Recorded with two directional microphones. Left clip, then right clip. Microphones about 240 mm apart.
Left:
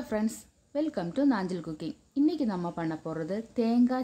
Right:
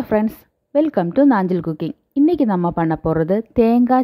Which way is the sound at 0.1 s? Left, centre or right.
Right.